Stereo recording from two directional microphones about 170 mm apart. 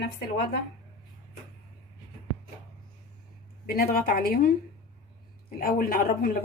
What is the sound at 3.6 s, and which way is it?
Speech, 65° left (ahead or behind).